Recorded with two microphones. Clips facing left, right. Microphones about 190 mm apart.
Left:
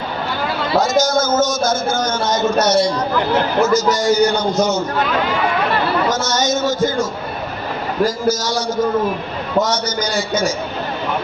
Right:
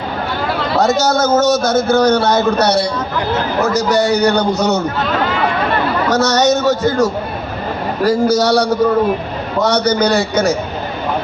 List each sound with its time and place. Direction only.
0.8 s a man's voice: 65° right (ahead or behind)
6.1 s a man's voice: 65° right (ahead or behind)